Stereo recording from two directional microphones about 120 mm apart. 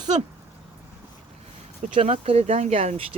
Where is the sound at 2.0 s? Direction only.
60° right (ahead or behind).